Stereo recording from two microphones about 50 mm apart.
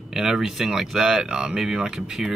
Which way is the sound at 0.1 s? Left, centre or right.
Centre.